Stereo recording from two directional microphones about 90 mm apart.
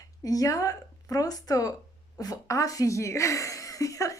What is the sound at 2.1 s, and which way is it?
Speech, 40° left (ahead or behind).